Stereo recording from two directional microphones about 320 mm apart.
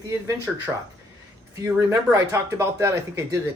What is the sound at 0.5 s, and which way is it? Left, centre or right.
Speech, centre.